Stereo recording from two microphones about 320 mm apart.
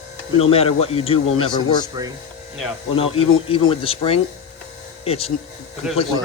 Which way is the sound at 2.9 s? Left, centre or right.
Centre.